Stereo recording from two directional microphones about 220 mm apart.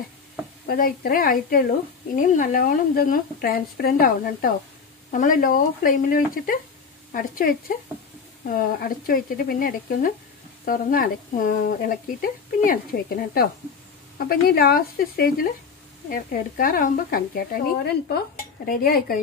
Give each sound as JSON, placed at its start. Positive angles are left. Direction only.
{"t": 0.7, "sound": "a woman's voice", "side_deg": 40}